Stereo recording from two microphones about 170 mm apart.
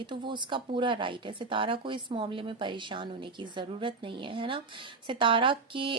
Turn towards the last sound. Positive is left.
turn(degrees=-30)  # may be behind; listen again after turning